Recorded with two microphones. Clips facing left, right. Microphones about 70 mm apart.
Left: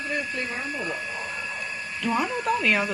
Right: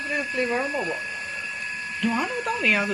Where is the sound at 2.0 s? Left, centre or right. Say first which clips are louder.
Even; centre.